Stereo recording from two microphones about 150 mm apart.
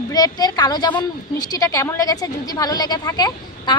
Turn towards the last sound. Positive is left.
turn(degrees=25)  # may be behind; listen again after turning